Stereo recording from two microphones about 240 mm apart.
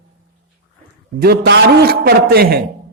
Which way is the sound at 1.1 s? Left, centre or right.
Right.